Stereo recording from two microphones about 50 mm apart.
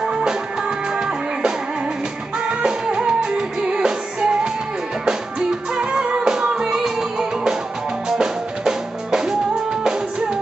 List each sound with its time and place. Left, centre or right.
0.0 s music: centre
2.6 s music: centre